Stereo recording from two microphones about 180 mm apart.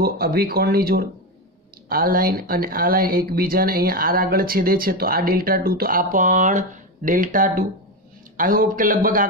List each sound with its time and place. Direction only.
0.0 s a man's voice: 60° right (ahead or behind)